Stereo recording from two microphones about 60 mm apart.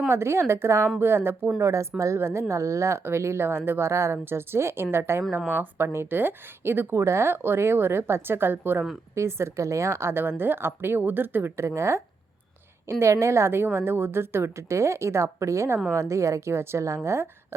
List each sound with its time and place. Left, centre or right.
0.1 s a woman's voice: right
1.5 s a woman's voice: right
4.2 s a woman's voice: right
6.9 s a woman's voice: right
9.1 s a woman's voice: right
11.5 s a woman's voice: right